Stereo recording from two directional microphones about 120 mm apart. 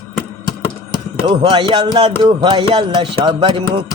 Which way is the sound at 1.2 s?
45° right (ahead or behind).